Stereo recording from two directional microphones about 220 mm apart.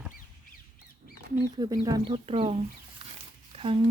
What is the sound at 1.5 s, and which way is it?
Speech, 15° right (ahead or behind).